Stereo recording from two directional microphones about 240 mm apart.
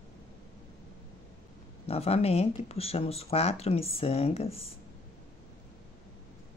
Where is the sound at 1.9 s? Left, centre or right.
Left.